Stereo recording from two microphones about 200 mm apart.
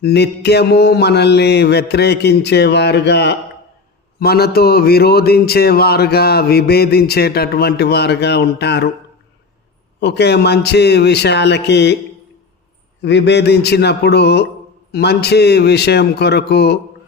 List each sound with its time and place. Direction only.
0.0 s mantra: 55° left (ahead or behind)
4.2 s a man's voice: 50° left (ahead or behind)
10.0 s mantra: 55° left (ahead or behind)
13.0 s mantra: 60° left (ahead or behind)